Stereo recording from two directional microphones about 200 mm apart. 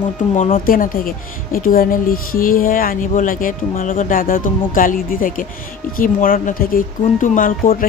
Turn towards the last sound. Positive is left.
turn(degrees=45)  # may be behind; listen again after turning